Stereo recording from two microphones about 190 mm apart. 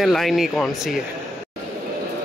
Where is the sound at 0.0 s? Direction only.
Centre (ahead or behind).